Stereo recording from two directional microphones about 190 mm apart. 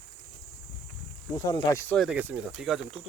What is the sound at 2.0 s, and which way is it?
Speech, 5° right (ahead or behind).